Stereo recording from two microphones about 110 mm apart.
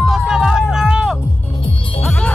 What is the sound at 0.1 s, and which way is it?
Music, 5° right (ahead or behind).